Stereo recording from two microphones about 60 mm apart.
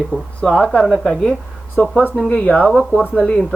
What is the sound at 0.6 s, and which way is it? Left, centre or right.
Speech, centre.